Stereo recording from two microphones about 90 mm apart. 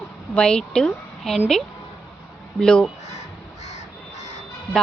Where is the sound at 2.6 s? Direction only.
10° left (ahead or behind).